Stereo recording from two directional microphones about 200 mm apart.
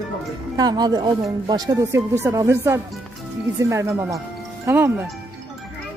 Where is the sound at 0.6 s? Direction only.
20° right (ahead or behind).